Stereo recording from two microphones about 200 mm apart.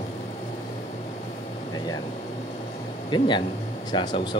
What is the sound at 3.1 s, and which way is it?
Speech, 25° left (ahead or behind).